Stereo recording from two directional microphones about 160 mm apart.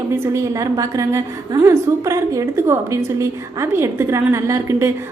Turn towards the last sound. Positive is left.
turn(degrees=-20)  # may be behind; listen again after turning